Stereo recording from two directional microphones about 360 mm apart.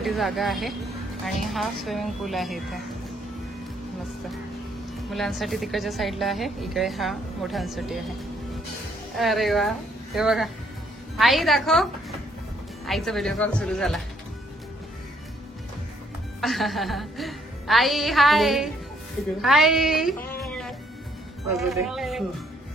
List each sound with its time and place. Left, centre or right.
0.0 s a woman's voice: centre
5.1 s a woman's voice: centre
9.1 s a woman's voice: centre
16.3 s a woman's voice: centre